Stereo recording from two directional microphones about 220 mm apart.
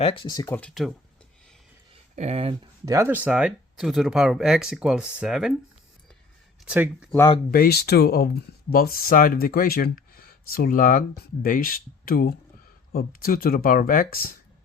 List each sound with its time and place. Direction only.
0.0 s speech: 25° left (ahead or behind)
0.6 s speech: centre (ahead or behind)
2.1 s speech: 30° right (ahead or behind)
2.8 s speech: 15° right (ahead or behind)
6.7 s speech: 5° right (ahead or behind)
7.5 s speech: 45° left (ahead or behind)